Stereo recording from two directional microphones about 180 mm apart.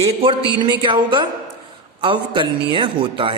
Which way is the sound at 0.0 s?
30° right (ahead or behind).